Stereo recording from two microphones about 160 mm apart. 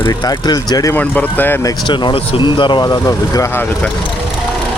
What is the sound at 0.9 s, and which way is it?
Speech, 10° left (ahead or behind).